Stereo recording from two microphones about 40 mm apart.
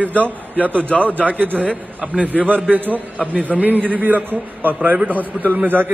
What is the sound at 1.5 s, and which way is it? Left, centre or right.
Speech, left.